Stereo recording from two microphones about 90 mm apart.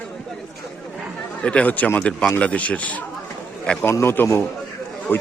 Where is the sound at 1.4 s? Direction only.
15° left (ahead or behind).